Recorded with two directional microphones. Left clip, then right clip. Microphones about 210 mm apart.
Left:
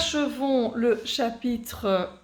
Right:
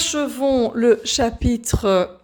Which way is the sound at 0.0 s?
50° right (ahead or behind).